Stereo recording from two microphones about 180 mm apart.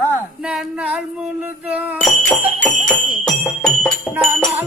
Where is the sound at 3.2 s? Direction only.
Centre (ahead or behind).